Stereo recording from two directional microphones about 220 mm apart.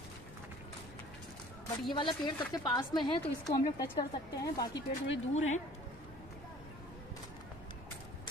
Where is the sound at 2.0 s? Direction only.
20° left (ahead or behind).